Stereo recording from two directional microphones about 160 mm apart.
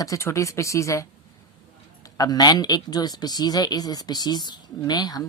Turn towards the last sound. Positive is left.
turn(degrees=25)  # may be behind; listen again after turning